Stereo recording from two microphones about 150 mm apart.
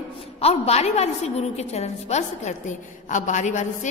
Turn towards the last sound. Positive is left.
turn(degrees=55)  # may be behind; listen again after turning